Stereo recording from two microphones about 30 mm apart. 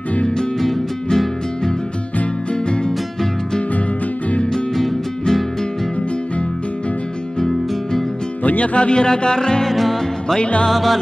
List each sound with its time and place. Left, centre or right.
0.6 s music: centre
8.7 s music: left
9.7 s music: centre